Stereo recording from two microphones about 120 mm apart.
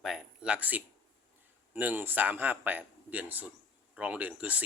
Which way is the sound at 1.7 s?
15° right (ahead or behind).